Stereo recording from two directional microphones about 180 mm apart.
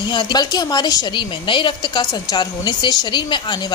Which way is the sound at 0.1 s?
25° left (ahead or behind).